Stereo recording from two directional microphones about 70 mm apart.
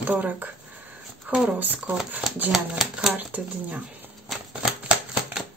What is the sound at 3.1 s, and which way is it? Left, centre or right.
Speech, right.